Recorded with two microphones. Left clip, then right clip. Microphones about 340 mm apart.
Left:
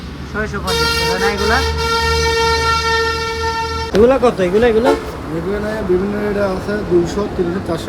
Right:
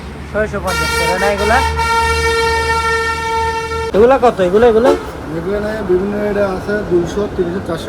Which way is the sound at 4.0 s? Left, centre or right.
Centre.